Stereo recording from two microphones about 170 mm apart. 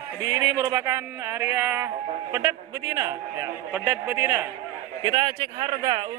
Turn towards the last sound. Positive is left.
turn(degrees=-25)  # may be behind; listen again after turning